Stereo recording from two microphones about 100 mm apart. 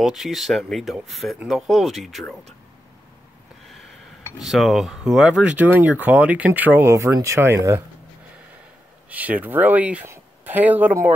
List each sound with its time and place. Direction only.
0.0 s speech: centre (ahead or behind)
4.4 s speech: centre (ahead or behind); by 7.8 s 25° right (ahead or behind)
9.1 s speech: 15° right (ahead or behind)